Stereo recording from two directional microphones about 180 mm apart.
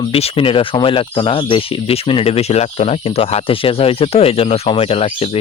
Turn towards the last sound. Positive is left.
turn(degrees=30)  # may be behind; listen again after turning